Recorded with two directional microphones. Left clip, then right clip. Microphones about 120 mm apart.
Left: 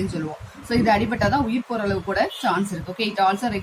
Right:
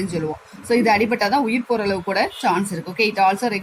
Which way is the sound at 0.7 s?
45° right (ahead or behind).